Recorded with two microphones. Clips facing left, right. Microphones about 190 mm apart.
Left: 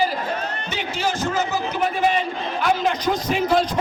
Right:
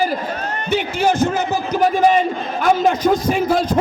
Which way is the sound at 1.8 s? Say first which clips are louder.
Right 7 dB; 40° right (ahead or behind).